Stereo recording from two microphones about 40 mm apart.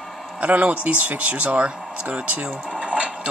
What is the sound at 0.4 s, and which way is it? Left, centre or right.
Speech, right.